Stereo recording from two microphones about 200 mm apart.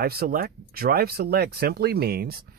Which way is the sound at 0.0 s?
50° right (ahead or behind).